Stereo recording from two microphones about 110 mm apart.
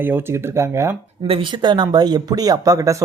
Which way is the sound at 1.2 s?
55° right (ahead or behind).